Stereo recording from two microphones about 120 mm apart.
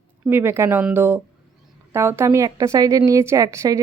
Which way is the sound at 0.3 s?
20° right (ahead or behind).